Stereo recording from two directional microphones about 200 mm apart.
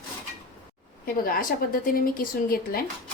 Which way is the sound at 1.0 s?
45° left (ahead or behind).